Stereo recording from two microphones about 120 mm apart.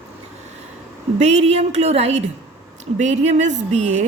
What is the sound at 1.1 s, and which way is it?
A woman's voice, 65° right (ahead or behind).